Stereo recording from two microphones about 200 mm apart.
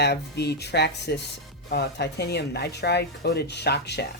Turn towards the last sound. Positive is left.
turn(degrees=55)  # may be behind; listen again after turning